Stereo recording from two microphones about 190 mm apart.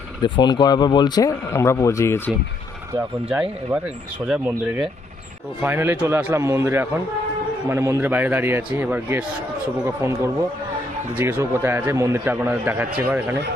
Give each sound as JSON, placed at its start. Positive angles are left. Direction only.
{"t": 0.2, "sound": "speech", "side_deg": 25}
{"t": 2.9, "sound": "a man's voice", "side_deg": -5}